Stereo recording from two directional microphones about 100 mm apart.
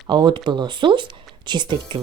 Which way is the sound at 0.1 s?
50° right (ahead or behind).